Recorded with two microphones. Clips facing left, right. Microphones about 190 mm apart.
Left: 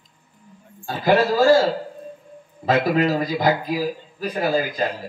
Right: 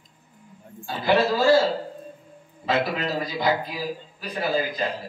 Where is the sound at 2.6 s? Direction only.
45° left (ahead or behind).